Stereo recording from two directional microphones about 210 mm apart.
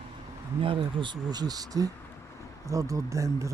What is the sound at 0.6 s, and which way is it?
Speech, 25° right (ahead or behind).